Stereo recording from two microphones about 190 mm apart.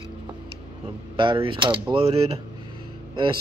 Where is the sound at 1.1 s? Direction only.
25° right (ahead or behind).